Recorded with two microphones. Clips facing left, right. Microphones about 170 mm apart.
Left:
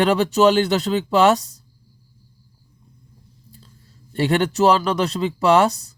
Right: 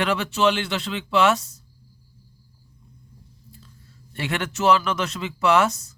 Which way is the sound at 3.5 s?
35° left (ahead or behind).